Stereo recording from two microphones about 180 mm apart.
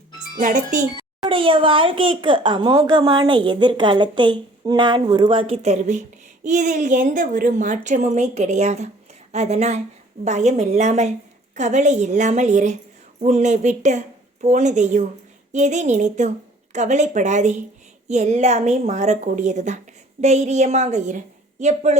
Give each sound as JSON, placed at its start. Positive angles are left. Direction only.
{"t": 0.3, "sound": "speech", "side_deg": -45}
{"t": 1.3, "sound": "a child's voice", "side_deg": -30}